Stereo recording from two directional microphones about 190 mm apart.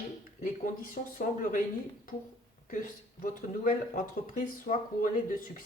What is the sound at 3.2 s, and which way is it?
A man's voice, 45° left (ahead or behind).